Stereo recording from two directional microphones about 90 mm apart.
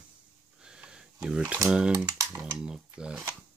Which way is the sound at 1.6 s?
10° right (ahead or behind).